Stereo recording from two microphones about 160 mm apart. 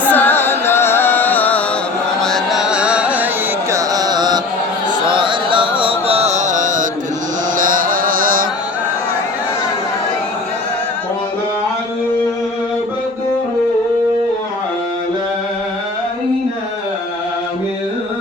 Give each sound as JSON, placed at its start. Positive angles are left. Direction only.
{"t": 0.0, "sound": "music", "side_deg": 10}
{"t": 3.7, "sound": "carnatic music", "side_deg": -20}
{"t": 5.0, "sound": "music", "side_deg": -30}